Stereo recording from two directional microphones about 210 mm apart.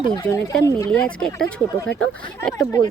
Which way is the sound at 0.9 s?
5° left (ahead or behind).